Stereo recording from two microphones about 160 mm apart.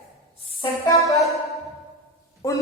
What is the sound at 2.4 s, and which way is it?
Music, 20° left (ahead or behind).